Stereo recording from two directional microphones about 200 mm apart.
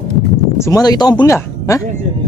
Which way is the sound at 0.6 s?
20° left (ahead or behind).